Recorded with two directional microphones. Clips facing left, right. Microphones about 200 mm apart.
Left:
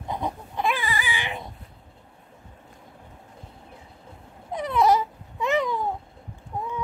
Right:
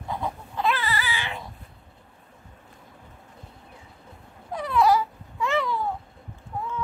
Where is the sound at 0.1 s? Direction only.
15° left (ahead or behind).